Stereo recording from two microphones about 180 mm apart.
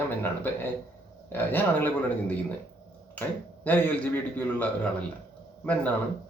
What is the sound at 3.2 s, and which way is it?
Speech, 10° left (ahead or behind).